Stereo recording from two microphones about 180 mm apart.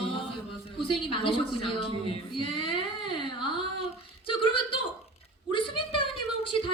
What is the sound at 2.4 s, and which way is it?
Music, 30° left (ahead or behind).